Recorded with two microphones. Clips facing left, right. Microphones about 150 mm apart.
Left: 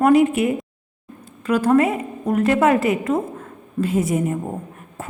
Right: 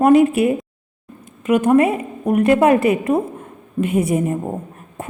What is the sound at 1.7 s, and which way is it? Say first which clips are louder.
A woman's voice: right 1 dB; 25° right (ahead or behind).